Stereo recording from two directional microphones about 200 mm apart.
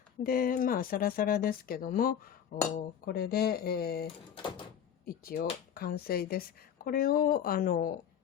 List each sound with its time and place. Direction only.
0.2 s speech: 45° left (ahead or behind)
5.0 s speech: 50° left (ahead or behind)